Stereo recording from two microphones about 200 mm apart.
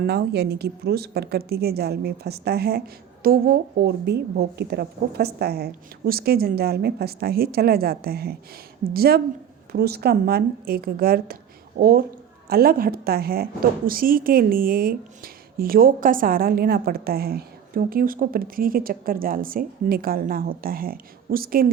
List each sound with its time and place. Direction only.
0.0 s a woman's voice: 55° right (ahead or behind)